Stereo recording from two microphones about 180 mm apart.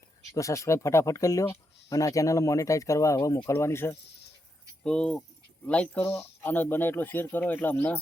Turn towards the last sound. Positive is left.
turn(degrees=10)  # may be behind; listen again after turning